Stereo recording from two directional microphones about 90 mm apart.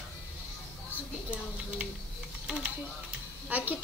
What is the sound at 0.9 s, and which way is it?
A woman's voice, 15° right (ahead or behind).